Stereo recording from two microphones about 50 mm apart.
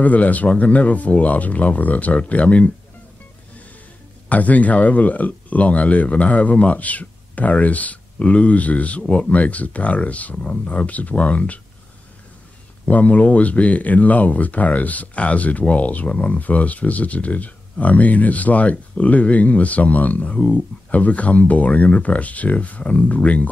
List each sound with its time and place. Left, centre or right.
0.0 s speech: left
4.3 s speech: left
12.8 s speech: left